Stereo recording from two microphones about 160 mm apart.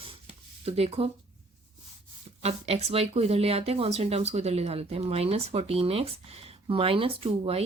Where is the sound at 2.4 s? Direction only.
40° right (ahead or behind).